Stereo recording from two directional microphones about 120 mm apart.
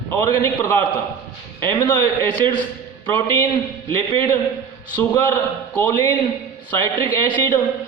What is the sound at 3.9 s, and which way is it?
A man's voice, 25° left (ahead or behind).